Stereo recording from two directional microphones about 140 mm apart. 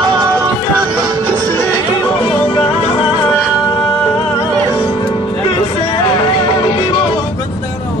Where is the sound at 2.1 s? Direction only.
40° left (ahead or behind).